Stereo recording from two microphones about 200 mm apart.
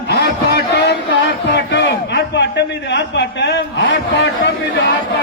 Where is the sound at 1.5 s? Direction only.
60° left (ahead or behind).